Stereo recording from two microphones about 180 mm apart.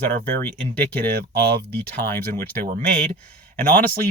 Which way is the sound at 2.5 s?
60° right (ahead or behind).